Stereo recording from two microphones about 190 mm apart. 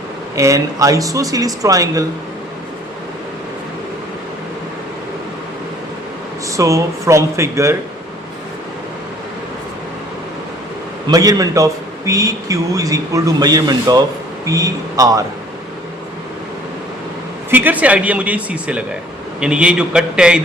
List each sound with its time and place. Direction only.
0.3 s a man's voice: 15° right (ahead or behind)
6.6 s a man's voice: 15° right (ahead or behind)
11.1 s a man's voice: 20° right (ahead or behind)
17.5 s a man's voice: 10° right (ahead or behind)